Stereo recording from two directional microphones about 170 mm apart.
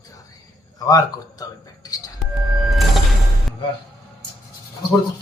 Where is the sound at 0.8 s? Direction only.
20° left (ahead or behind).